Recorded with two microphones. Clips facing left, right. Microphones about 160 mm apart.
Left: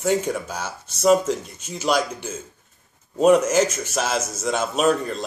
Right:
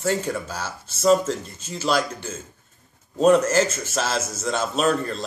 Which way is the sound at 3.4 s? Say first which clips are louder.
Left 1 dB; 15° left (ahead or behind).